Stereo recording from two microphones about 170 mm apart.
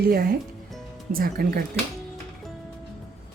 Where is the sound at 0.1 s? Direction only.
60° right (ahead or behind).